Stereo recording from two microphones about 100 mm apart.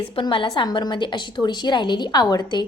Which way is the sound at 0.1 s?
60° left (ahead or behind).